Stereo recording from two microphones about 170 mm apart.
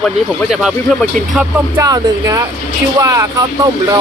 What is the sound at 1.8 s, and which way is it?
Speech, 20° right (ahead or behind).